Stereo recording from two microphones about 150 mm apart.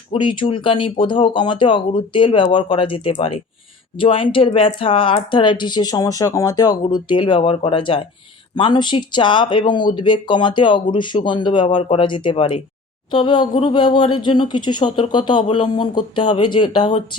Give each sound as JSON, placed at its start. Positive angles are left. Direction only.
{"t": 0.1, "sound": "speech", "side_deg": 35}